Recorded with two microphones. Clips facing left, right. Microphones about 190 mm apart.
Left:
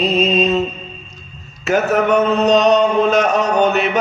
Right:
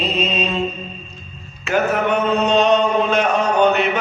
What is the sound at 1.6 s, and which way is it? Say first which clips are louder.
Mantra: left 3 dB; 40° left (ahead or behind).